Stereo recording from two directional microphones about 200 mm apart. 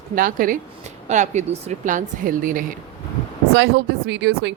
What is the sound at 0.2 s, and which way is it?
Speech, 45° right (ahead or behind).